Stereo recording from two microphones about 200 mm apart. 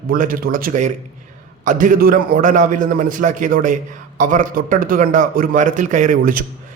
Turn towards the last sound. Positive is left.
turn(degrees=-40)  # may be behind; listen again after turning